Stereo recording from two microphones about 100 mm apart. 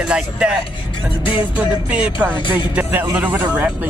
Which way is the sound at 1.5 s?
10° right (ahead or behind).